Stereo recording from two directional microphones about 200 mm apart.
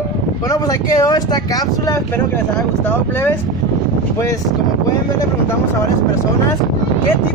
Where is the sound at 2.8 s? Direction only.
10° left (ahead or behind).